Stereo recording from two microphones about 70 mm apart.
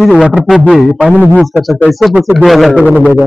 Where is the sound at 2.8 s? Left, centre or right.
Left.